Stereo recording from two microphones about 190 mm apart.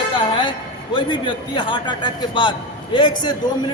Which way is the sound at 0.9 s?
25° left (ahead or behind).